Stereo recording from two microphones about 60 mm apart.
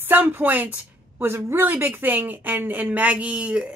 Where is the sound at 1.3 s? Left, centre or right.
Right.